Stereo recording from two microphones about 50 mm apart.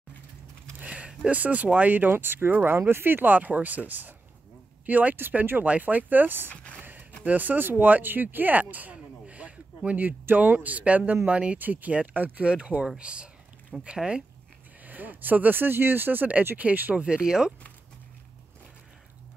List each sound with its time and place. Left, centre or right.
0.7 s speech: right
6.5 s speech: left
6.8 s speech: right
8.9 s a sound: right
10.3 s speech: right
11.5 s speech: right; by 14.2 s centre
14.9 s speech: right
16.9 s speech: centre